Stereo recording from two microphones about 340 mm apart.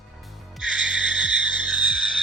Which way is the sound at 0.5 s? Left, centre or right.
Centre.